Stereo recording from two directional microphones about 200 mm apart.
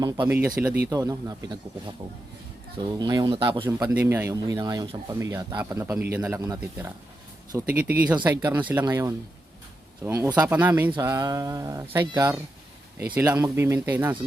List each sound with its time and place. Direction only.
0.3 s speech: 5° right (ahead or behind)
0.9 s speech: 15° right (ahead or behind)
3.0 s speech: 20° right (ahead or behind)